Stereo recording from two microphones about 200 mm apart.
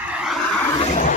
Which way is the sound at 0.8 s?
35° left (ahead or behind).